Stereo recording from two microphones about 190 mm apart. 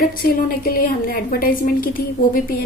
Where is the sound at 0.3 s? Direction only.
50° left (ahead or behind).